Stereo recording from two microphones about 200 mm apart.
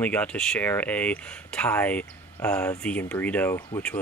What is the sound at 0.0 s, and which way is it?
Speech, 5° left (ahead or behind).